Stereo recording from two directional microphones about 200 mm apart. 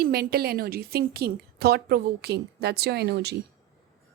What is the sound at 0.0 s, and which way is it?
Speech, 50° right (ahead or behind).